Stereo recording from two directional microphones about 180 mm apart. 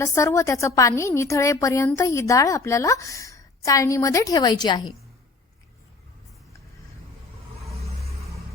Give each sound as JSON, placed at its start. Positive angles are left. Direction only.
{"t": 0.0, "sound": "a woman's voice", "side_deg": 15}